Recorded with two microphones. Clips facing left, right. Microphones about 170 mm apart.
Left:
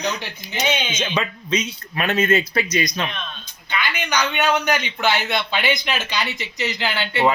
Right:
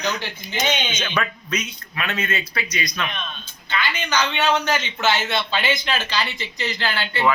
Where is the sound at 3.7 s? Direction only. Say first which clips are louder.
Even; 15° left (ahead or behind).